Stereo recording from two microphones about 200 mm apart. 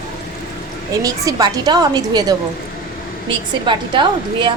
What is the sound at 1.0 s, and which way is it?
A woman's voice, 20° right (ahead or behind).